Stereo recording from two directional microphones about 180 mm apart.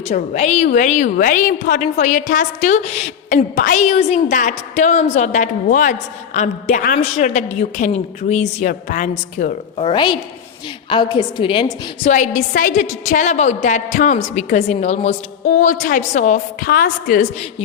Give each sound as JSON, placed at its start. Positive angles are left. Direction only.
{"t": 0.1, "sound": "a woman's voice", "side_deg": 40}
{"t": 9.8, "sound": "a woman's voice", "side_deg": 25}
{"t": 12.1, "sound": "a woman's voice", "side_deg": 45}